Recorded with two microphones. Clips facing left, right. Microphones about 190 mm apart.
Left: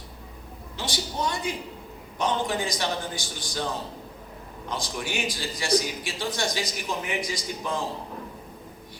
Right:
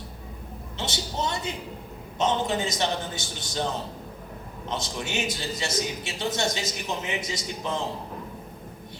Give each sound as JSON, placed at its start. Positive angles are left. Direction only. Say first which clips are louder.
{"t": 0.8, "sound": "a man's voice", "louder": "even", "side_deg": -25}
{"t": 4.7, "sound": "a man's voice", "louder": "right 1 dB", "side_deg": -25}